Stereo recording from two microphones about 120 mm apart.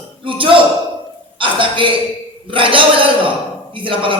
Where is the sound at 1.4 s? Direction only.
45° right (ahead or behind).